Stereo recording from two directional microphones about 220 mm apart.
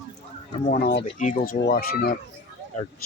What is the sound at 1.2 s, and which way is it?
Speech, 35° left (ahead or behind).